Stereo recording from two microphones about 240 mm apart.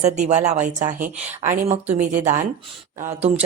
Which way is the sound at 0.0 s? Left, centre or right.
Right.